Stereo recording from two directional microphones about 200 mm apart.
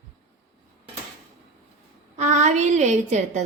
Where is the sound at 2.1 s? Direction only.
35° right (ahead or behind).